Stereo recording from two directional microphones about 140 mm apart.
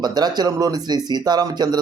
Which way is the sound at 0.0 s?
30° right (ahead or behind).